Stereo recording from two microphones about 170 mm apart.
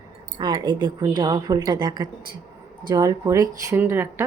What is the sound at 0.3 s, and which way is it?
Speech, 25° right (ahead or behind).